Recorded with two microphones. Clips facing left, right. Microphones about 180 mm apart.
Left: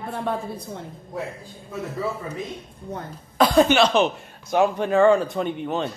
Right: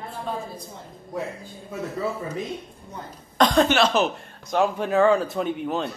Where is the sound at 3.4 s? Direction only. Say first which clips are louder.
Left 2 dB; 5° left (ahead or behind).